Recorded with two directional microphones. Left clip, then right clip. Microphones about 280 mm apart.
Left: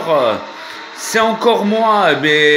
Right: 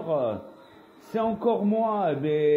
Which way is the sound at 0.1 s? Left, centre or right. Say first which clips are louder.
Left 13 dB; left.